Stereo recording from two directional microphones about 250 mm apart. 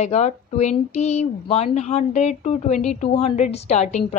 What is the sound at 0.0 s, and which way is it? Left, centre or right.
Speech, left.